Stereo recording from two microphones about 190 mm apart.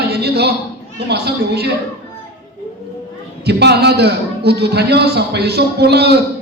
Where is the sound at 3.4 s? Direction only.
60° right (ahead or behind).